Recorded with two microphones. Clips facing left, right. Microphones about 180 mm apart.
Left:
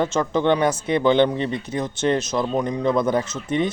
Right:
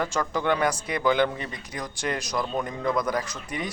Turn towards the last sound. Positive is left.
turn(degrees=25)  # may be behind; listen again after turning